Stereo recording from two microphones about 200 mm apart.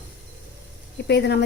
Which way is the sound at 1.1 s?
55° left (ahead or behind).